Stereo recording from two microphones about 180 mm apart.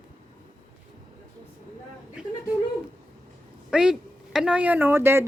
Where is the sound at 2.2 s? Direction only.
5° right (ahead or behind).